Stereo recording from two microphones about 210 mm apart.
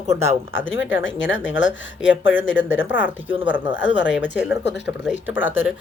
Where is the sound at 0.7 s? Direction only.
65° left (ahead or behind).